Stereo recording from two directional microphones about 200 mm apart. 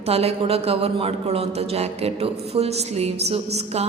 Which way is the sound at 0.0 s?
30° right (ahead or behind).